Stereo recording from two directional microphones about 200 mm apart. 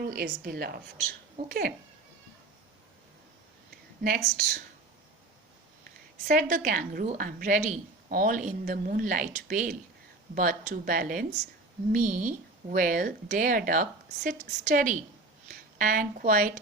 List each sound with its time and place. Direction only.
0.0 s a woman's voice: 50° right (ahead or behind)
4.0 s a woman's voice: 50° right (ahead or behind)
5.8 s a woman's voice: 45° right (ahead or behind)